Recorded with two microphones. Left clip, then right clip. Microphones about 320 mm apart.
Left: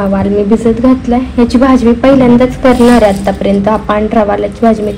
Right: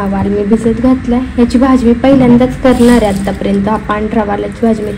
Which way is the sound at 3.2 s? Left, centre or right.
Left.